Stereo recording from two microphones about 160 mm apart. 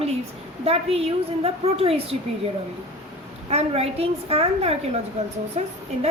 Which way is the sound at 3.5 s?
40° right (ahead or behind).